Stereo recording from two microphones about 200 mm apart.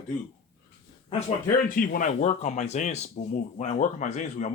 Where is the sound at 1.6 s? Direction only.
45° left (ahead or behind).